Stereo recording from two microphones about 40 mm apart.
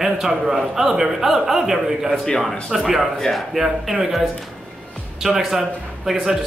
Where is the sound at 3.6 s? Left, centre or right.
Centre.